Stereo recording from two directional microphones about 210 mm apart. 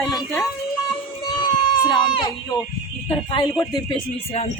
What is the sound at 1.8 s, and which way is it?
Speech, 20° left (ahead or behind).